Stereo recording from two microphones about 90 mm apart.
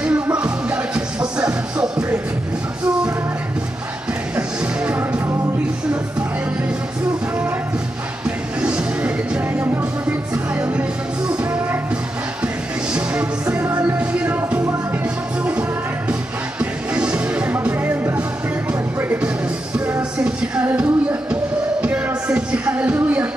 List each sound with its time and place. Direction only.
0.0 s music: 10° right (ahead or behind)
4.4 s music: 10° right (ahead or behind)
8.5 s music: 10° right (ahead or behind)
12.9 s music: 15° right (ahead or behind)
16.1 s music: 10° right (ahead or behind)